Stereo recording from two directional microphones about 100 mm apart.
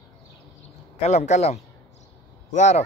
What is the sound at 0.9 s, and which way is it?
Speech, 90° left.